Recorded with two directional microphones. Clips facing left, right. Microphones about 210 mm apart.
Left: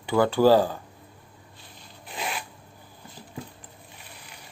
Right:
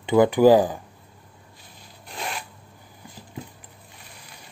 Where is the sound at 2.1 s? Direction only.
Centre (ahead or behind).